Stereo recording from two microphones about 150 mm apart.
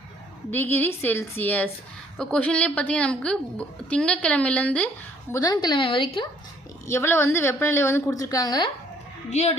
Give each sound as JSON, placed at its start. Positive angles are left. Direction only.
{"t": 0.5, "sound": "a woman's voice", "side_deg": 15}
{"t": 5.3, "sound": "a woman's voice", "side_deg": 25}
{"t": 6.8, "sound": "a woman's voice", "side_deg": 15}
{"t": 9.3, "sound": "speech", "side_deg": 45}